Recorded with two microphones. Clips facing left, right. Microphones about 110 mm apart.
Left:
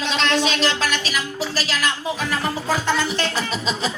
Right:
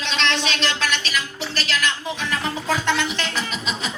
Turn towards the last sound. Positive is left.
turn(degrees=40)  # may be behind; listen again after turning